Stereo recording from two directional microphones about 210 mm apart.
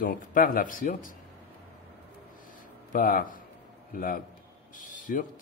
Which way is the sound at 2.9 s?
40° left (ahead or behind).